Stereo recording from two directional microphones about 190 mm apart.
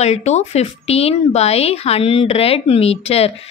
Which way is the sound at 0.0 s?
35° left (ahead or behind).